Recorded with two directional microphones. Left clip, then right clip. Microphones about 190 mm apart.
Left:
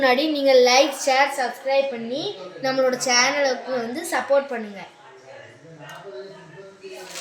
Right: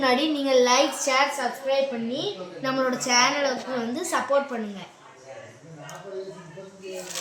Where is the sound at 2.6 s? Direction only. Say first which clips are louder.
Left 5 dB; 20° right (ahead or behind).